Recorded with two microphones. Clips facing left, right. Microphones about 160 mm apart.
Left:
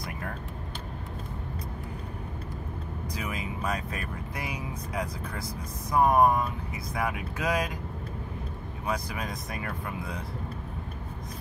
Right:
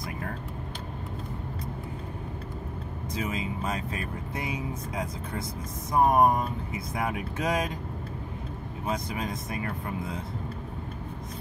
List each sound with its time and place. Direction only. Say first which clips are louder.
3.2 s speech: right 4 dB; 25° right (ahead or behind)
8.8 s speech: right 1 dB; 25° right (ahead or behind)